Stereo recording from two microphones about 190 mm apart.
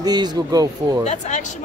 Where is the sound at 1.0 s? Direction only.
40° left (ahead or behind).